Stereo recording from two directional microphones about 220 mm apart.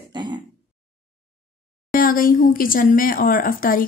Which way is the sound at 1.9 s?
40° left (ahead or behind).